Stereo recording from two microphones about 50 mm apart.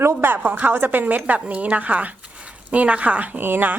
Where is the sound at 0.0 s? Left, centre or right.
Right.